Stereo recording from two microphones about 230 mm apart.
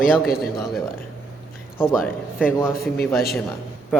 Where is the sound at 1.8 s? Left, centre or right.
Centre.